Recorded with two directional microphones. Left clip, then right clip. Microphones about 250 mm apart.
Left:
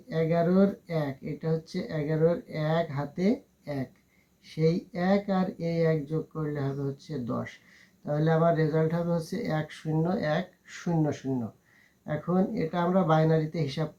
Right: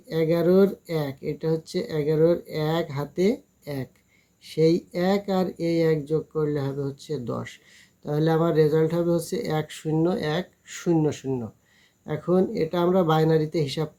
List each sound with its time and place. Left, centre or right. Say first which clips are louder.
0.1 s speech: right 5 dB; right